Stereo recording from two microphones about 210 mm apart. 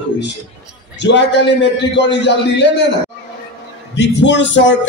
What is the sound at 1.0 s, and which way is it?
Speech, 55° left (ahead or behind).